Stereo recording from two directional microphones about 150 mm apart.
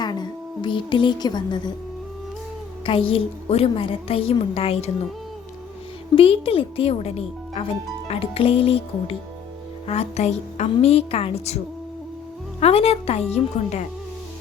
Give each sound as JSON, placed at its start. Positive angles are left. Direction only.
{"t": 0.0, "sound": "speech", "side_deg": 30}
{"t": 2.8, "sound": "speech", "side_deg": 35}
{"t": 6.1, "sound": "a woman's voice", "side_deg": 40}